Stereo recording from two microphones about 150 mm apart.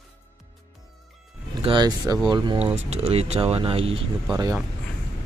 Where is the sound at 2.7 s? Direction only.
45° right (ahead or behind).